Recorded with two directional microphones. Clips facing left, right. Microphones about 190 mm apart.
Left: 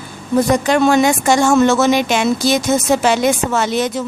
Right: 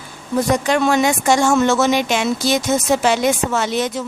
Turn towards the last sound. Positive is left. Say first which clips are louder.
# left 2 dB
turn(degrees=50)  # may be behind; listen again after turning